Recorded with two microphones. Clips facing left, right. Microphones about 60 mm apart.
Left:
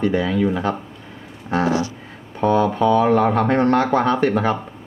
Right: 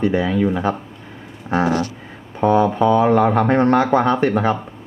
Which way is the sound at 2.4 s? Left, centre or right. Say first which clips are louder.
Right 2 dB; centre.